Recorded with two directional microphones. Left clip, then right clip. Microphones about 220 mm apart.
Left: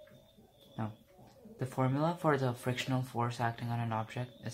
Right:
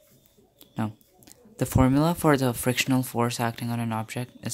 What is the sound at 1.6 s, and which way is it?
Speech, 45° right (ahead or behind).